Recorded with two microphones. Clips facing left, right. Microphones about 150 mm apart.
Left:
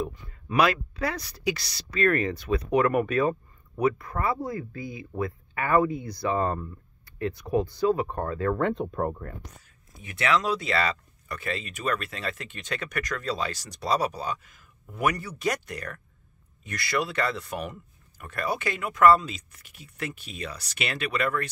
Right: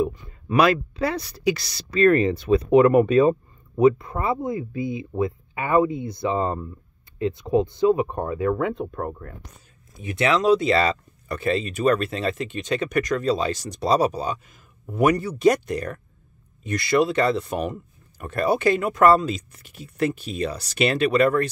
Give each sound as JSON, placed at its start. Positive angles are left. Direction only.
{"t": 0.5, "sound": "speech", "side_deg": -35}
{"t": 9.9, "sound": "speech", "side_deg": -20}